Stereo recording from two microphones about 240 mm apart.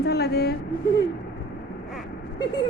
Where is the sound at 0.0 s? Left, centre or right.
Left.